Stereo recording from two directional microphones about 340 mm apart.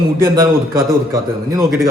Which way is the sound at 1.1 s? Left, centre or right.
Centre.